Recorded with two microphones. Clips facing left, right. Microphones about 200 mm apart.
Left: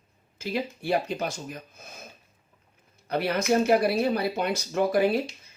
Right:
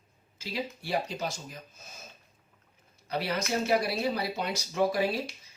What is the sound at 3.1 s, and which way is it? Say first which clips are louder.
Speech: left 6 dB; 55° left (ahead or behind).